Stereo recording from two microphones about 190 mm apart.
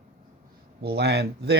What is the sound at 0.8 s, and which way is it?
Speech, 60° right (ahead or behind).